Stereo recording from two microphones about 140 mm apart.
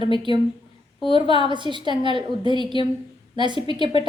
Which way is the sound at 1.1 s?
35° right (ahead or behind).